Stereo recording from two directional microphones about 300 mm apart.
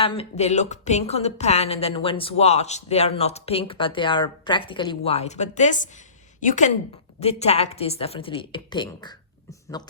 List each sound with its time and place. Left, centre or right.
0.0 s speech: centre